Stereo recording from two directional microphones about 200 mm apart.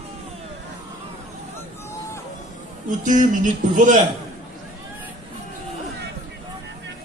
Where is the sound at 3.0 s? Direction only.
40° right (ahead or behind).